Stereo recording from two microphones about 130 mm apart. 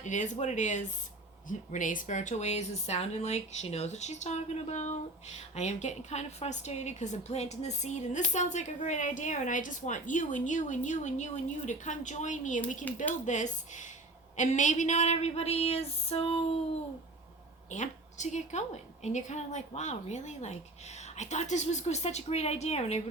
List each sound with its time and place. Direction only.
0.0 s a woman's voice: 70° left (ahead or behind)
1.5 s a woman's voice: 85° left; by 16.4 s 50° left (ahead or behind)
17.7 s a woman's voice: 65° left (ahead or behind)